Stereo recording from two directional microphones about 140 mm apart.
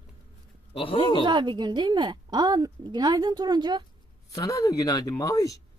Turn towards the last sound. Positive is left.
turn(degrees=25)  # may be behind; listen again after turning